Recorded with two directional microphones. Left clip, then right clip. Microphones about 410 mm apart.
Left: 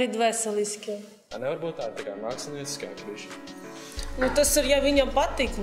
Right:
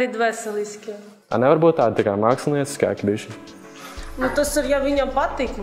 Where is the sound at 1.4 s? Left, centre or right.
Right.